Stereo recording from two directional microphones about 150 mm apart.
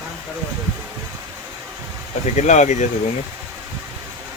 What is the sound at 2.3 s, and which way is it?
Speech, 50° left (ahead or behind).